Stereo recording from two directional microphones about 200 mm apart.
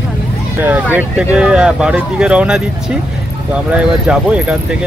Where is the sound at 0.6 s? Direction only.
10° right (ahead or behind).